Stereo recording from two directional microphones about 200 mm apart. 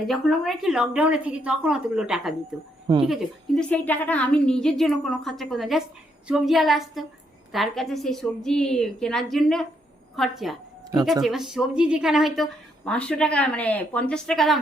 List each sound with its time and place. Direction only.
0.1 s a woman's voice: centre (ahead or behind)
2.8 s speech: 20° right (ahead or behind)
3.1 s a woman's voice: centre (ahead or behind)